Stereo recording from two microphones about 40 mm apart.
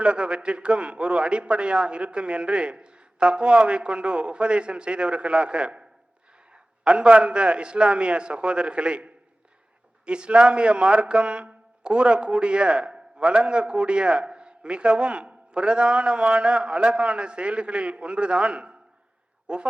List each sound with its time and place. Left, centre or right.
0.0 s speech: right